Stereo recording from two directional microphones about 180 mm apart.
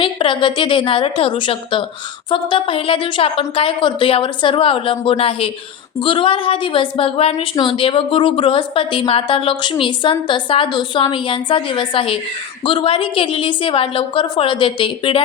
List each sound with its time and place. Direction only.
0.0 s a woman's voice: 30° left (ahead or behind)